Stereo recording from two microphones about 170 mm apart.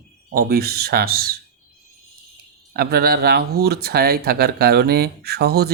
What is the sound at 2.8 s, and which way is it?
Speech, 65° right (ahead or behind).